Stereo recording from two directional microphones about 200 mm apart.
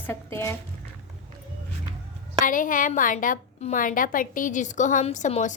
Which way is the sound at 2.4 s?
40° left (ahead or behind).